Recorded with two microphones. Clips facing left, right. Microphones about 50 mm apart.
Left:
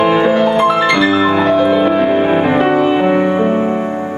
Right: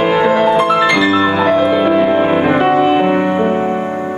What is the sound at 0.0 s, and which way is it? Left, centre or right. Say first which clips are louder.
Music: even; centre.